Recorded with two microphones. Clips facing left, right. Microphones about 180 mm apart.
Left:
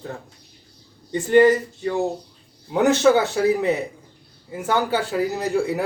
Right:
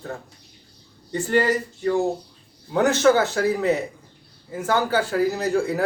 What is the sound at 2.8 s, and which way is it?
A man's voice, 20° left (ahead or behind).